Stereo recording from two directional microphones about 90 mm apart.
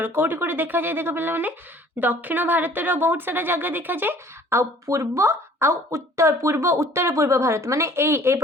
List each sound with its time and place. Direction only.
0.0 s speech: 20° right (ahead or behind)